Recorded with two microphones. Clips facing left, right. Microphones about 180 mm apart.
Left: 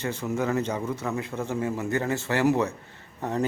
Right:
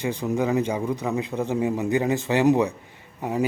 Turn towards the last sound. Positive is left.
turn(degrees=-10)  # may be behind; listen again after turning